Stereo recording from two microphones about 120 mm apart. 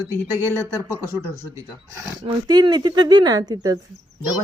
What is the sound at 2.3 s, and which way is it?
Speech, 40° right (ahead or behind).